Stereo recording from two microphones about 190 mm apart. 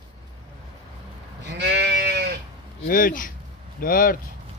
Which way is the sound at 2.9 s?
45° left (ahead or behind).